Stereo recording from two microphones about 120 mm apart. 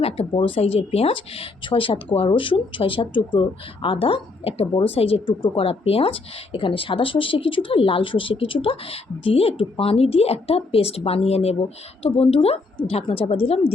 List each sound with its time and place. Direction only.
0.0 s speech: 50° left (ahead or behind)